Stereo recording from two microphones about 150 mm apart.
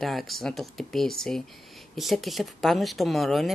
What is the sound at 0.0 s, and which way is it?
Speech, centre (ahead or behind).